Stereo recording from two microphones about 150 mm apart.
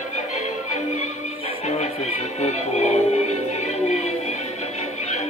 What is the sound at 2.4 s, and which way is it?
Music, 50° left (ahead or behind).